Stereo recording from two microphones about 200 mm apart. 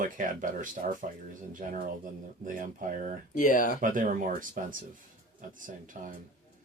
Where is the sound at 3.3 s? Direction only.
40° left (ahead or behind).